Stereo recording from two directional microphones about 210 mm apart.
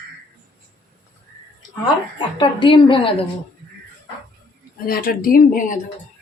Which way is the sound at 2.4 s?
25° left (ahead or behind).